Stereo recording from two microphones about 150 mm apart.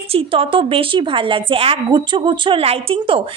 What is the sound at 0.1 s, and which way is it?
A woman's voice, 35° right (ahead or behind).